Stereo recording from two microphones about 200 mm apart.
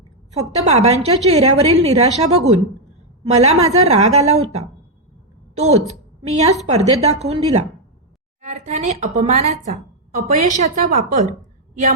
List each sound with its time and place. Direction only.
0.3 s a woman's voice: 30° right (ahead or behind)
5.5 s a woman's voice: 30° right (ahead or behind)